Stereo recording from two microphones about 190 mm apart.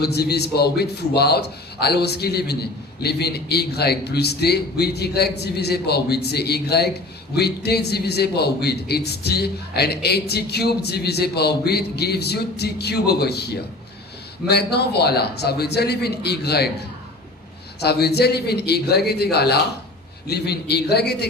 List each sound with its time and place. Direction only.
0.0 s a man's voice: 60° left (ahead or behind)
17.8 s a man's voice: 60° left (ahead or behind)